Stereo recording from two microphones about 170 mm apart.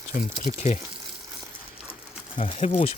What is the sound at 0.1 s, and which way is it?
Speech, 55° left (ahead or behind).